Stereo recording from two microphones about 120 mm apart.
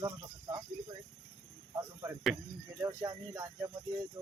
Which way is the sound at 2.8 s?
25° right (ahead or behind).